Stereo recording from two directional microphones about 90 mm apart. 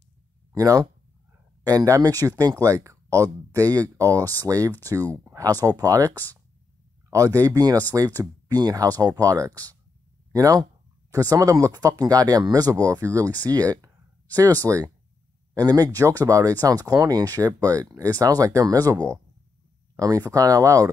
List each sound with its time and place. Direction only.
0.6 s speech: 40° right (ahead or behind)
8.5 s speech: 50° right (ahead or behind)